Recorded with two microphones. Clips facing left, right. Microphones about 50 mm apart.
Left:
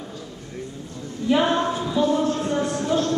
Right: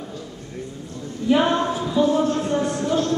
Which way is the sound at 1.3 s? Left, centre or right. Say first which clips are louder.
Right 1 dB; centre.